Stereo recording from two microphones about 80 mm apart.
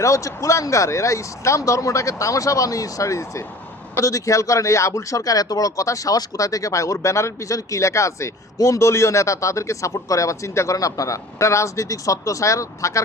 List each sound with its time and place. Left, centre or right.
0.0 s a man's voice: left